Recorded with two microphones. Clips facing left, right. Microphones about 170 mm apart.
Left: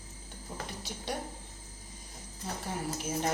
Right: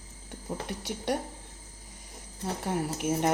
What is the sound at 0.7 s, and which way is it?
Speech, 70° right (ahead or behind).